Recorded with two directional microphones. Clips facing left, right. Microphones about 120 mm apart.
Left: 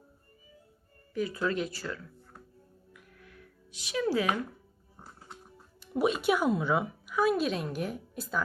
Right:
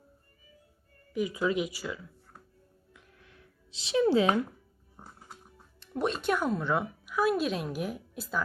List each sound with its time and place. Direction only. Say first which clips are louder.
1.1 s speech: right 2 dB; 15° right (ahead or behind)
2.9 s music: left 3 dB; 25° right (ahead or behind)
4.9 s a sound: even; 5° right (ahead or behind)
5.8 s a woman's voice: left 3 dB; 5° left (ahead or behind)